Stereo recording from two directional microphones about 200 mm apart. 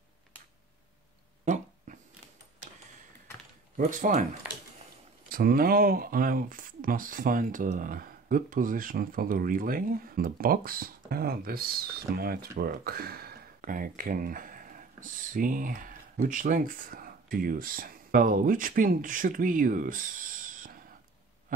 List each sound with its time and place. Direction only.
1.4 s dog: 35° right (ahead or behind)
3.7 s speech: 40° right (ahead or behind)
5.3 s speech: 50° right (ahead or behind)
21.5 s a sound: 40° right (ahead or behind)